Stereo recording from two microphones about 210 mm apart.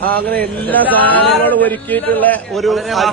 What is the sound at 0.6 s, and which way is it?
A man's voice, 10° left (ahead or behind).